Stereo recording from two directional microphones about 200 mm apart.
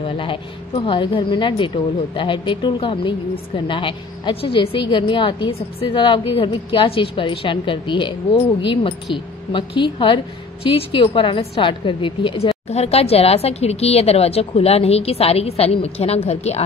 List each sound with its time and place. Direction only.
0.0 s a woman's voice: 25° left (ahead or behind)